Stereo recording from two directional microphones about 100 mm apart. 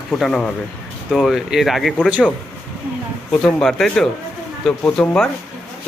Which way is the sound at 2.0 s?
10° right (ahead or behind).